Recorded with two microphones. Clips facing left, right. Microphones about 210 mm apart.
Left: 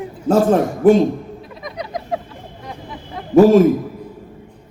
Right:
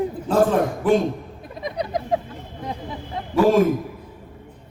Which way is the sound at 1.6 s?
30° right (ahead or behind).